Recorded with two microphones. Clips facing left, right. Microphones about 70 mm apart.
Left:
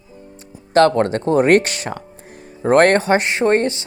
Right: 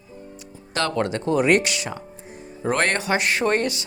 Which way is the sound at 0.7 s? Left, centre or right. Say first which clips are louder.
Left 10 dB; left.